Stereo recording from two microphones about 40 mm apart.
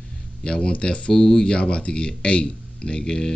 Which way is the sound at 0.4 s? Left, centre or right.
Left.